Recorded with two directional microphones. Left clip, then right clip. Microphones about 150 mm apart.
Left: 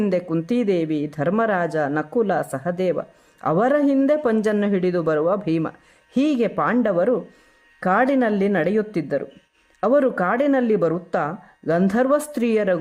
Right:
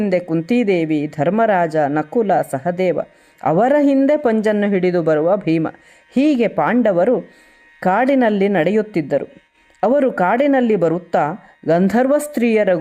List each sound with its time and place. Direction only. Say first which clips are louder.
0.0 s speech: right 4 dB; 15° right (ahead or behind)